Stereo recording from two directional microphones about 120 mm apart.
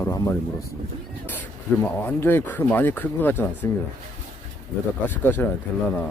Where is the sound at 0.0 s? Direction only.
25° left (ahead or behind).